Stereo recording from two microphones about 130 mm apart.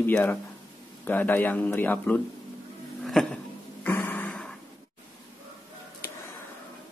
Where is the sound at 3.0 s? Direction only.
5° left (ahead or behind).